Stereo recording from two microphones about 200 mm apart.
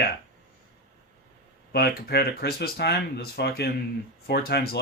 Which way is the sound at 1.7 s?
55° left (ahead or behind).